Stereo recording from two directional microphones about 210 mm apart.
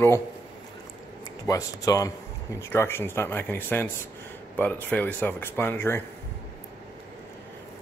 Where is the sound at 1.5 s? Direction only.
15° left (ahead or behind).